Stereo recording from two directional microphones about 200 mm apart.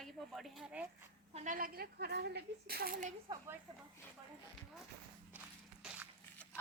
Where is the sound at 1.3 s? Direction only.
35° right (ahead or behind).